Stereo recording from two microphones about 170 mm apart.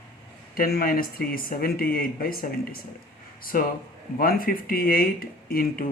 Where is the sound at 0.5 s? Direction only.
60° left (ahead or behind).